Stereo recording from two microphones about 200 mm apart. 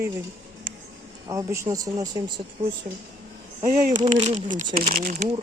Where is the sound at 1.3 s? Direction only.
15° right (ahead or behind).